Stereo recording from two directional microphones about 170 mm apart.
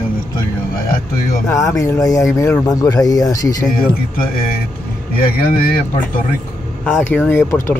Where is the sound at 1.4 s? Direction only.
20° left (ahead or behind).